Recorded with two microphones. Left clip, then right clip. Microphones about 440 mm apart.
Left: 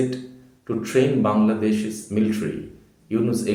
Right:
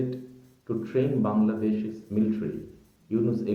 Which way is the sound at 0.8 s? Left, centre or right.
Right.